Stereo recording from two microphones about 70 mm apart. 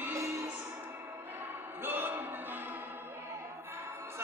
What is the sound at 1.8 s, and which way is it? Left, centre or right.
Music, right.